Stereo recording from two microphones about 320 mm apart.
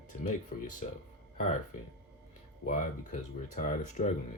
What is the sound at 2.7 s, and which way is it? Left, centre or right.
Speech, left.